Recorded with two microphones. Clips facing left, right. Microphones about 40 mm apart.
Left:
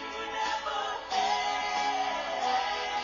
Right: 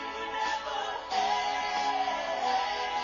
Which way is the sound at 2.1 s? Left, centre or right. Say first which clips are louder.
Right 1 dB; centre.